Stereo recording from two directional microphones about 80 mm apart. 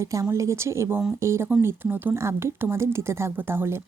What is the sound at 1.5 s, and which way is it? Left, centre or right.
Speech, right.